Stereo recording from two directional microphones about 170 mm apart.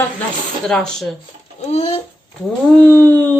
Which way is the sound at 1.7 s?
35° left (ahead or behind).